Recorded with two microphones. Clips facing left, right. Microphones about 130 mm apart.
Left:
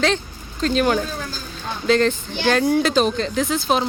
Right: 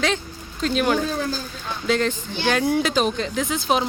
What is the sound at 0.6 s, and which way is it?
Speech, 5° right (ahead or behind).